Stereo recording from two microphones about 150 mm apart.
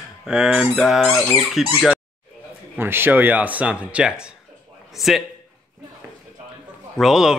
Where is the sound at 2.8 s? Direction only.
15° right (ahead or behind).